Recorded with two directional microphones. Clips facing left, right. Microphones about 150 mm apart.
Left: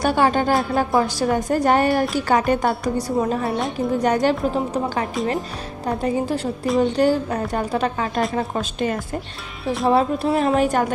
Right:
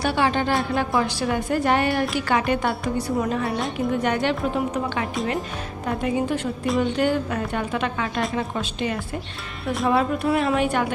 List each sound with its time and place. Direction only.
0.0 s a woman's voice: 45° left (ahead or behind)
9.8 s a woman's voice: 30° left (ahead or behind)